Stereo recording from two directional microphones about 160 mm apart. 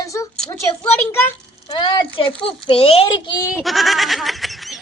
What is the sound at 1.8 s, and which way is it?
A child's voice, 30° left (ahead or behind).